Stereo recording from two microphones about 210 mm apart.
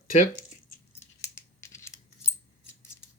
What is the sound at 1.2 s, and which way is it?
Scissors, 15° left (ahead or behind).